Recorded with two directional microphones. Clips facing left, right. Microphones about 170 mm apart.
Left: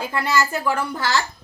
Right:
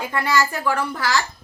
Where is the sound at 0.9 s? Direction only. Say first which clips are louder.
Even; 25° left (ahead or behind).